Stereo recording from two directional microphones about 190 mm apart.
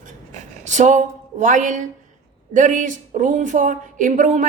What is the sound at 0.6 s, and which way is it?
A woman's voice, 40° right (ahead or behind).